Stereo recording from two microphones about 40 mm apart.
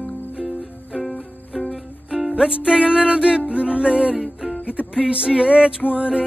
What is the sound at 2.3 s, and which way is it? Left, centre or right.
Music, centre.